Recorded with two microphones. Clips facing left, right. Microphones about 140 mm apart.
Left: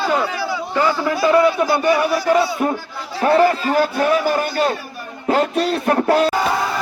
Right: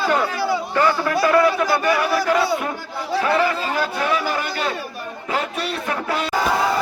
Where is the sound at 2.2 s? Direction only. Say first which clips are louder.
Left 3 dB; 35° left (ahead or behind).